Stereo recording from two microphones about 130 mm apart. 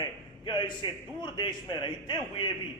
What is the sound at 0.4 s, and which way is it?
Speech, 35° left (ahead or behind).